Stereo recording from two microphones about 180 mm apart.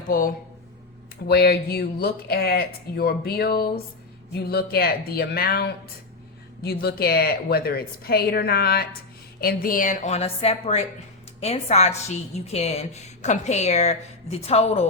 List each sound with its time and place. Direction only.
0.1 s speech: 50° left (ahead or behind)
1.3 s a woman's voice: 60° left (ahead or behind); by 14.8 s 35° left (ahead or behind)